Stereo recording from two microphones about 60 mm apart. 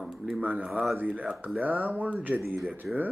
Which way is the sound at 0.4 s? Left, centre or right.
Right.